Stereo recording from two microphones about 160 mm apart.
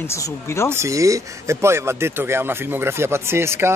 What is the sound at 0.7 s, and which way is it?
Speech, 20° right (ahead or behind).